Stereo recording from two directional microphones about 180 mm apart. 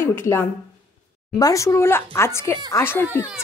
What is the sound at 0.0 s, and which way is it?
Speech, 15° left (ahead or behind).